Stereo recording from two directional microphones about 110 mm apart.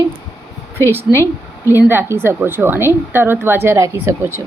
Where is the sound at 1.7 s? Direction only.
20° right (ahead or behind).